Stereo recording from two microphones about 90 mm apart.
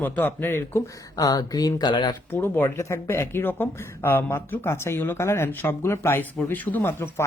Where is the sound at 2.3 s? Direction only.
25° left (ahead or behind).